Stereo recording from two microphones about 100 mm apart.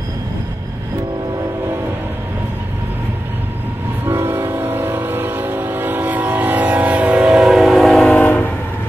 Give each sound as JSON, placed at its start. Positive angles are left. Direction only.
{"t": 4.0, "sound": "train", "side_deg": -25}
{"t": 8.1, "sound": "train", "side_deg": 15}